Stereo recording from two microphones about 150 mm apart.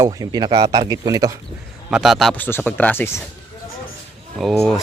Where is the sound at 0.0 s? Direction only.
25° right (ahead or behind).